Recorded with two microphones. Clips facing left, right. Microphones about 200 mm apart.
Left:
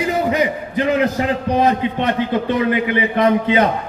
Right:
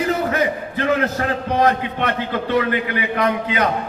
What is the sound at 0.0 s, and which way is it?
A man's voice, 15° left (ahead or behind).